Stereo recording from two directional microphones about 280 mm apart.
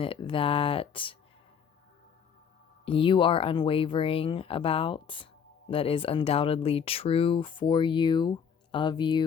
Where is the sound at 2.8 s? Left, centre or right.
Centre.